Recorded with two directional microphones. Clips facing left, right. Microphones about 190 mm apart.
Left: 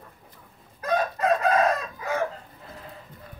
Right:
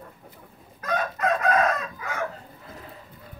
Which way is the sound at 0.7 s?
30° left (ahead or behind).